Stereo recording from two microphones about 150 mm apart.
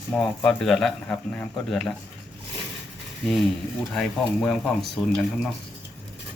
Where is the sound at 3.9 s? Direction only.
5° left (ahead or behind).